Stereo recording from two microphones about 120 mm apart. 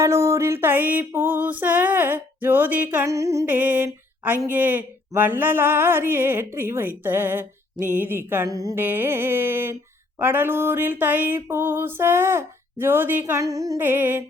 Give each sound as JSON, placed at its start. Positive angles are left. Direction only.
{"t": 0.0, "sound": "speech", "side_deg": -25}
{"t": 3.1, "sound": "music", "side_deg": -25}
{"t": 3.4, "sound": "speech", "side_deg": -15}
{"t": 8.4, "sound": "music", "side_deg": -30}
{"t": 8.8, "sound": "music", "side_deg": -15}
{"t": 10.2, "sound": "speech", "side_deg": -15}
{"t": 13.8, "sound": "speech", "side_deg": -15}